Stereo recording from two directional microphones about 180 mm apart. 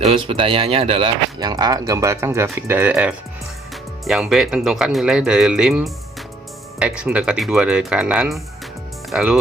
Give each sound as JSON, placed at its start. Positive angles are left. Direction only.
{"t": 0.0, "sound": "speech", "side_deg": -30}